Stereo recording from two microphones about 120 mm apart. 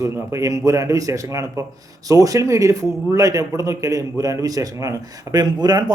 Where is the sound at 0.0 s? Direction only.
25° right (ahead or behind).